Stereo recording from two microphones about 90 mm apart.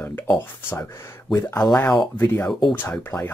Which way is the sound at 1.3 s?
40° left (ahead or behind).